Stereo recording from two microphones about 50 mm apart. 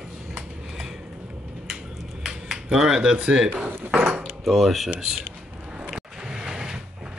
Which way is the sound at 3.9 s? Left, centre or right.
Right.